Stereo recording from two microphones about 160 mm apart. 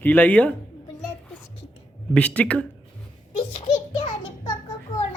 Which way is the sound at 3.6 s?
45° left (ahead or behind).